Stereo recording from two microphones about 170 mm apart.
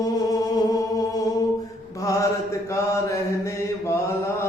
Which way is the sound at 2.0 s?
20° left (ahead or behind).